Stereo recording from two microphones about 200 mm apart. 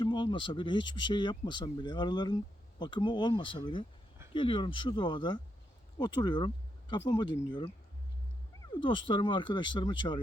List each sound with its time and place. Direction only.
0.0 s speech: 25° left (ahead or behind)
8.7 s speech: 25° left (ahead or behind)